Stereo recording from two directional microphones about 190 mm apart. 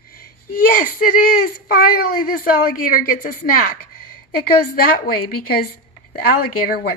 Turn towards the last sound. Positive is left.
turn(degrees=50)  # may be behind; listen again after turning